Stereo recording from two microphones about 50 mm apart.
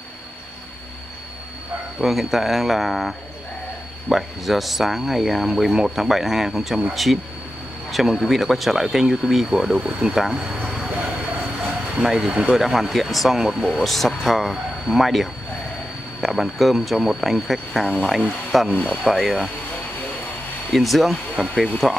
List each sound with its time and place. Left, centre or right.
2.0 s speech: centre
11.6 s a sound: centre
12.5 s speech: centre
20.7 s speech: centre